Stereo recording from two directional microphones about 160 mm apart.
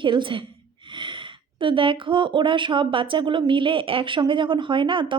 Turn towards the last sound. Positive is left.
turn(degrees=-30)  # may be behind; listen again after turning